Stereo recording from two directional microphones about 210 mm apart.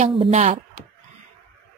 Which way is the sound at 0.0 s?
30° right (ahead or behind).